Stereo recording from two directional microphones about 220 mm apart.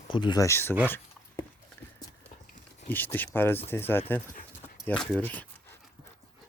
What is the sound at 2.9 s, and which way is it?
Speech, 10° left (ahead or behind).